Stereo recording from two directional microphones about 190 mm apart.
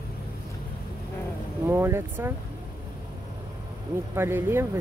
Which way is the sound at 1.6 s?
15° right (ahead or behind).